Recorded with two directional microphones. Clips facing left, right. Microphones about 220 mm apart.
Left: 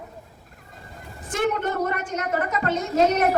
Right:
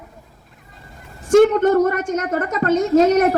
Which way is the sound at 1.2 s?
45° right (ahead or behind).